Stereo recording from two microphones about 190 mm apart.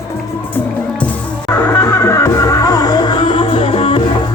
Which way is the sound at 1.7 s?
15° left (ahead or behind).